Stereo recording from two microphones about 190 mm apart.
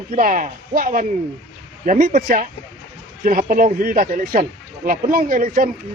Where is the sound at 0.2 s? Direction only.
45° right (ahead or behind).